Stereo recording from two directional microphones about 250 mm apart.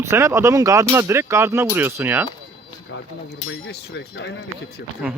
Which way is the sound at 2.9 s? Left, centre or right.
Left.